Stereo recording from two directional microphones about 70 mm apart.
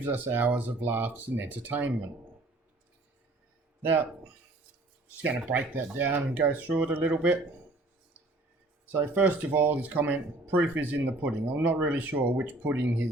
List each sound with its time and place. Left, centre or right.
0.0 s speech: right
3.8 s speech: right
5.5 s speech: right
8.9 s speech: right